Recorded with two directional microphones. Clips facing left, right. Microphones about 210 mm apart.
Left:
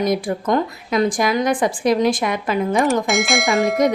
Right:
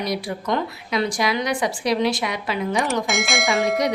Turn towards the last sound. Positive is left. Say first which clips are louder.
# left 3 dB
turn(degrees=0)  # may be behind; listen again after turning